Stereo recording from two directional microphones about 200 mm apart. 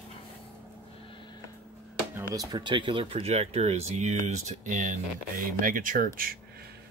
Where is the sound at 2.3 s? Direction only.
20° right (ahead or behind).